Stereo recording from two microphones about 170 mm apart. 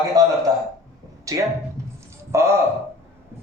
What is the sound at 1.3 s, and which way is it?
A woman's voice, 20° right (ahead or behind).